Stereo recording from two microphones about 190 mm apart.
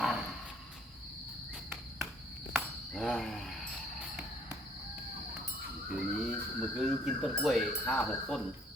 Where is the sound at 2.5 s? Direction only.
Centre (ahead or behind).